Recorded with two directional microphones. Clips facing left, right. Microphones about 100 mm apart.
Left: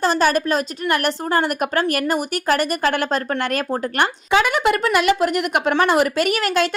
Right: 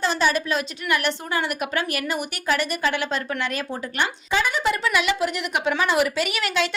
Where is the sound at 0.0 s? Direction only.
45° left (ahead or behind).